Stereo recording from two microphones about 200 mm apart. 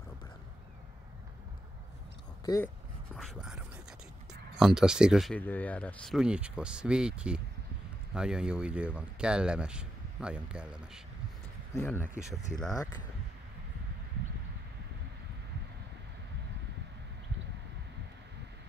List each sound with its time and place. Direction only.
2.4 s speech: 15° left (ahead or behind)
3.2 s speech: centre (ahead or behind)
11.7 s speech: 10° left (ahead or behind)